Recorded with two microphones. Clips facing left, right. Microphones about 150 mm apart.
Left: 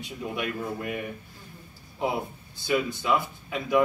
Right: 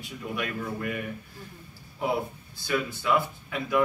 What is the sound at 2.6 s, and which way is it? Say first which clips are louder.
Speech: left 2 dB; 20° left (ahead or behind).